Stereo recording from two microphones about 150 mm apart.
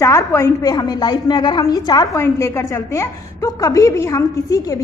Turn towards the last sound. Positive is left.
turn(degrees=25)  # may be behind; listen again after turning